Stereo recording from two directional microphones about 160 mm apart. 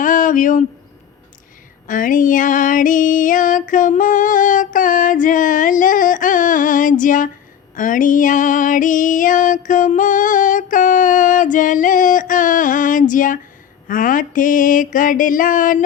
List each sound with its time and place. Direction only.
0.0 s a sound: 55° left (ahead or behind)
1.9 s female singing: 55° left (ahead or behind)
13.8 s mantra: 55° left (ahead or behind)